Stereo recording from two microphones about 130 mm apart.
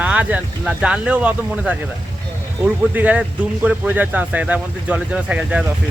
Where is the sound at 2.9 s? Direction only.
10° right (ahead or behind).